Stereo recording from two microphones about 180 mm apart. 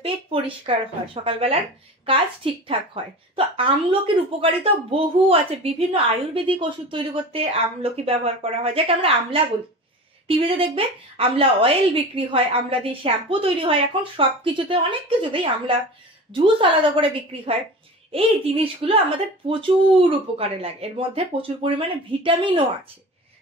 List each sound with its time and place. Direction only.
0.0 s a woman's voice: 30° right (ahead or behind)